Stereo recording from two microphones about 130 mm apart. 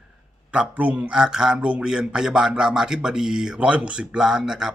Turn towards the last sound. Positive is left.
turn(degrees=-5)  # may be behind; listen again after turning